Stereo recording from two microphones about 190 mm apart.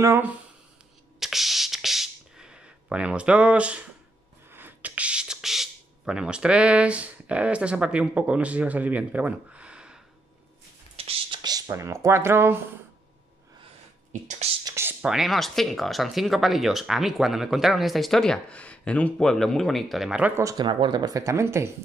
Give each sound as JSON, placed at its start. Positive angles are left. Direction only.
{"t": 0.0, "sound": "speech", "side_deg": -10}
{"t": 1.2, "sound": "a sound", "side_deg": 0}
{"t": 4.5, "sound": "speech", "side_deg": -10}
{"t": 11.0, "sound": "a sound", "side_deg": -30}
{"t": 14.2, "sound": "whispering", "side_deg": -35}
{"t": 14.6, "sound": "speech", "side_deg": -15}